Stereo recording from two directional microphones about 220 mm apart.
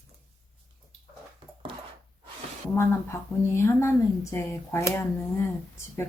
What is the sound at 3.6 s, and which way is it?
Speech, 10° left (ahead or behind).